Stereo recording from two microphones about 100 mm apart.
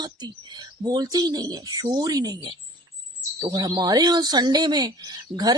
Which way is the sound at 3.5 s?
40° right (ahead or behind).